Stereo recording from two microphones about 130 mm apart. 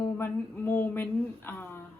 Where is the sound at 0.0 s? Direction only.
15° left (ahead or behind).